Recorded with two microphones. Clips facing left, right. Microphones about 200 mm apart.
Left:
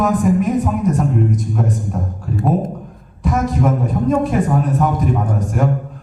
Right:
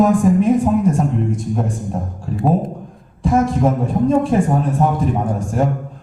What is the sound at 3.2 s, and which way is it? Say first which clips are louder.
A woman's voice: right 2 dB; 30° right (ahead or behind).